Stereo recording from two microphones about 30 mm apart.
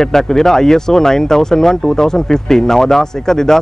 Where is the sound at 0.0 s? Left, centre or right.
Centre.